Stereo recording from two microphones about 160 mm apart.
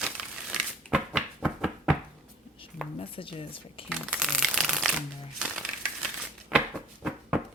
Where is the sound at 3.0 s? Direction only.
35° left (ahead or behind).